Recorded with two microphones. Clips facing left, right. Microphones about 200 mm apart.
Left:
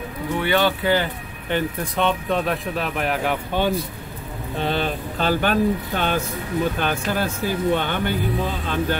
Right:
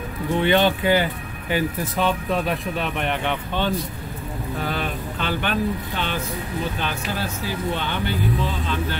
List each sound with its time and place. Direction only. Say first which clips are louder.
0.4 s speech: right 2 dB; 20° right (ahead or behind)
1.5 s speech: even; 5° right (ahead or behind)
4.6 s speech: left 5 dB; 30° left (ahead or behind); by 8.7 s 50° left (ahead or behind)